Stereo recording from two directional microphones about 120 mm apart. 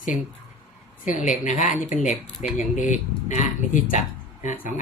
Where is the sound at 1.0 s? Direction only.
90° left.